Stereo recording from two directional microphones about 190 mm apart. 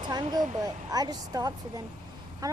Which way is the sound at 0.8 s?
20° right (ahead or behind).